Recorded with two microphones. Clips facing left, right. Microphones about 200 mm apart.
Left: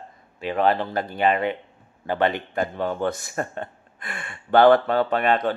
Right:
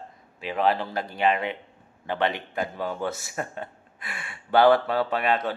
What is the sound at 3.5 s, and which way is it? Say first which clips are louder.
Gasp: left 3 dB; 5° right (ahead or behind).